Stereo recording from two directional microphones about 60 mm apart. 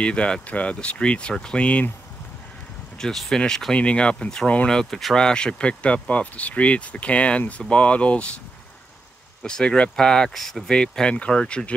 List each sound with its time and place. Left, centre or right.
0.0 s speech: centre
3.0 s speech: centre
9.4 s speech: centre
10.7 s speech: centre